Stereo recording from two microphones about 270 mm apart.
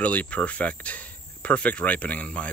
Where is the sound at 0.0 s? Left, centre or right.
Centre.